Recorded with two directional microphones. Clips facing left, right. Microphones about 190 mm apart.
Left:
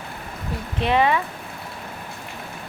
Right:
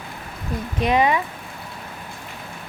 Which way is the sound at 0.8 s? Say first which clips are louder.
Right 1 dB; 15° right (ahead or behind).